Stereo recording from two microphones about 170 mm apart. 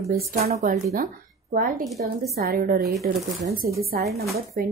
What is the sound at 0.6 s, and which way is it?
A woman's voice, 55° right (ahead or behind).